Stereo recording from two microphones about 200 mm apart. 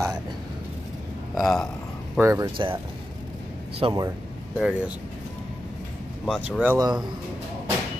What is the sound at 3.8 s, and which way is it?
Speech, 20° right (ahead or behind).